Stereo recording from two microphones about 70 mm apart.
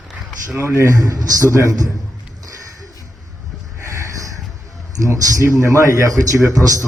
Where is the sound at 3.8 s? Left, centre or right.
Right.